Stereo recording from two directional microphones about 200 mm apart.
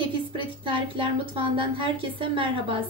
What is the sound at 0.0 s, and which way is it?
A woman's voice, 25° right (ahead or behind).